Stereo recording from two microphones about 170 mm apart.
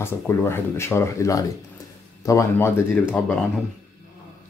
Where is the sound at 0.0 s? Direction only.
15° left (ahead or behind).